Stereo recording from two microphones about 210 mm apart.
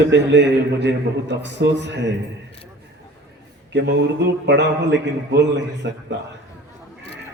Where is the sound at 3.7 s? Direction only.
55° right (ahead or behind).